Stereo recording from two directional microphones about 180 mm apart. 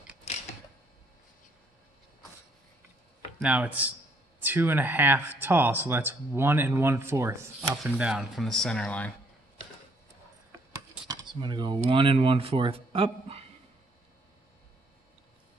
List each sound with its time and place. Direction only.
3.3 s speech: 5° right (ahead or behind)
8.0 s speech: 5° right (ahead or behind)
11.1 s speech: 25° right (ahead or behind)